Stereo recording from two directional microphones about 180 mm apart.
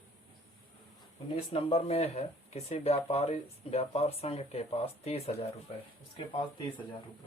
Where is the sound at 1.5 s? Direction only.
35° left (ahead or behind).